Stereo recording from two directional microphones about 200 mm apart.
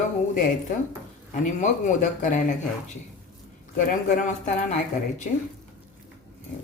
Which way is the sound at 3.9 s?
40° left (ahead or behind).